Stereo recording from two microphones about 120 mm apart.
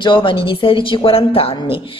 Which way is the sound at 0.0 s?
45° left (ahead or behind).